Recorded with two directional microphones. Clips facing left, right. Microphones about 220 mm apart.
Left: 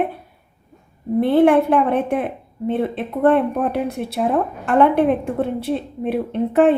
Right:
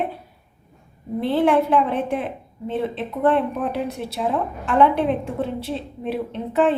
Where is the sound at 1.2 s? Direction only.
55° left (ahead or behind).